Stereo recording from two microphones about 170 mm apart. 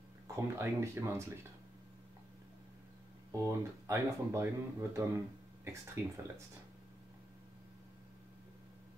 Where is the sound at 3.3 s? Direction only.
20° right (ahead or behind).